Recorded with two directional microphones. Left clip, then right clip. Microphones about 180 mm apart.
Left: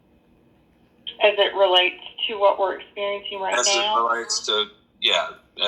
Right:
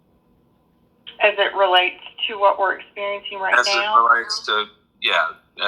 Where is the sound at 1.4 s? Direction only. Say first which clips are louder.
Right 2 dB; 20° left (ahead or behind).